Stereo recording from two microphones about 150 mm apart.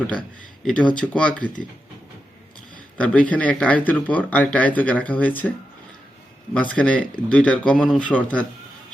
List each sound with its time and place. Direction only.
0.6 s speech: 5° left (ahead or behind)
3.0 s speech: 10° left (ahead or behind)
6.5 s speech: 5° left (ahead or behind)